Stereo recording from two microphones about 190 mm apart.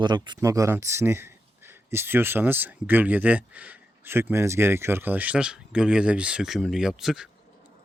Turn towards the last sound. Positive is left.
turn(degrees=-5)  # may be behind; listen again after turning